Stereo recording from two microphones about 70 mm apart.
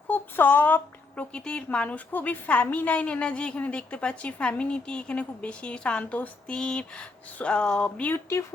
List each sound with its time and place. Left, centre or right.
0.1 s a woman's voice: left
8.1 s speech: left